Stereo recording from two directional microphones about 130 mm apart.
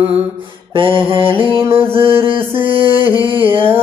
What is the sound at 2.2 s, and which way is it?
Mantra, 45° right (ahead or behind).